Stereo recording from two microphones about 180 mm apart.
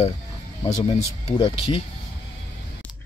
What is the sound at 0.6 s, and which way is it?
Speech, 35° left (ahead or behind).